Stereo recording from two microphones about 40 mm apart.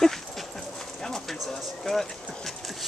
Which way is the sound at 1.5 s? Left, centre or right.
Centre.